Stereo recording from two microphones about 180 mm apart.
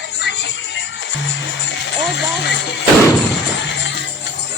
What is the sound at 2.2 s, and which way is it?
Speech, 70° left (ahead or behind).